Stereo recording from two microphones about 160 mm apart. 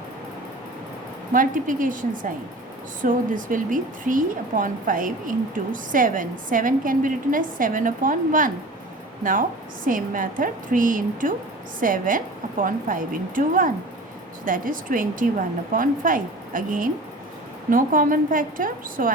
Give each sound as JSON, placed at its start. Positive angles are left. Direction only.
{"t": 1.3, "sound": "speech", "side_deg": -55}